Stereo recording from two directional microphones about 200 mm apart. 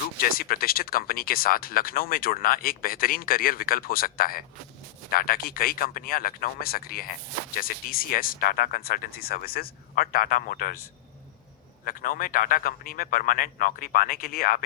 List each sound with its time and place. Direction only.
0.2 s speech: 45° left (ahead or behind)
11.9 s speech: 45° left (ahead or behind)